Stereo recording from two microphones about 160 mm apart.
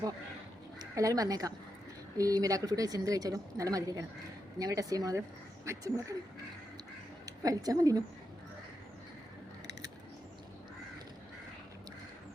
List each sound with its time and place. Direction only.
0.8 s a woman's voice: 20° right (ahead or behind)
7.3 s a woman's voice: 20° right (ahead or behind)